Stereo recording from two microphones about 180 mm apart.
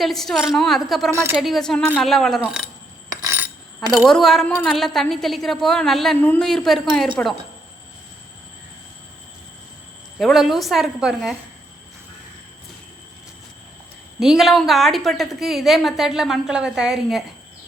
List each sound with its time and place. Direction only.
0.0 s a woman's voice: centre (ahead or behind)
1.1 s speech: 15° right (ahead or behind)
1.4 s a woman's voice: centre (ahead or behind)
3.1 s coin: 20° right (ahead or behind)
3.9 s a woman's voice: centre (ahead or behind)
10.2 s a woman's voice: centre (ahead or behind)
14.2 s a woman's voice: centre (ahead or behind)